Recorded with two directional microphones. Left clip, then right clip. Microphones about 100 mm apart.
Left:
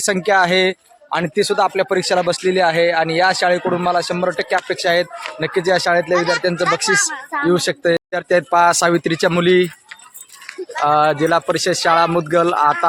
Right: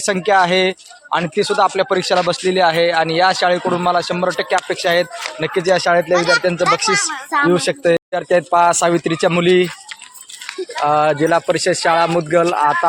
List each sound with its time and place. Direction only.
0.0 s speech: 20° left (ahead or behind)
6.1 s speech: 60° right (ahead or behind)
6.4 s speech: 20° left (ahead or behind)
7.1 s speech: 90° right
7.5 s speech: 10° left (ahead or behind)
8.1 s speech: 25° left (ahead or behind)
10.8 s speech: 15° left (ahead or behind)